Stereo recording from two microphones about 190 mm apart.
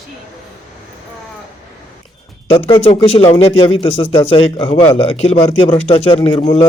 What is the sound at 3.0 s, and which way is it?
A man's voice, 30° left (ahead or behind).